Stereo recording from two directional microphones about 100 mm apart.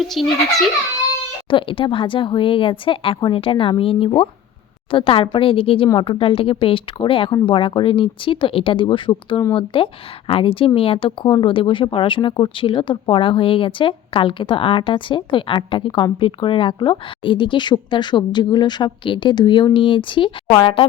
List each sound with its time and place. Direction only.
0.0 s a child's voice: centre (ahead or behind)
1.5 s speech: 60° left (ahead or behind)